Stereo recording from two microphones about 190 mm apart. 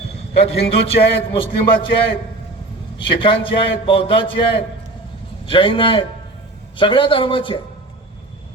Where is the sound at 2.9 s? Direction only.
25° left (ahead or behind).